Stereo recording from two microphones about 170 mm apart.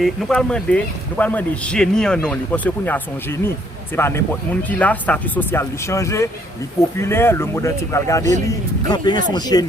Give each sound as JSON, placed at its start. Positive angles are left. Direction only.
{"t": 0.0, "sound": "a man's voice", "side_deg": 5}